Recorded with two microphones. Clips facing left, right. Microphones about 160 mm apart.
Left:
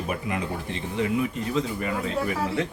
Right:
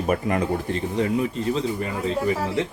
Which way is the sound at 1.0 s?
35° right (ahead or behind).